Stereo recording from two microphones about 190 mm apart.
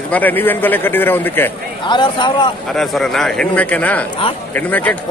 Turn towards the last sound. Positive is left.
turn(degrees=10)  # may be behind; listen again after turning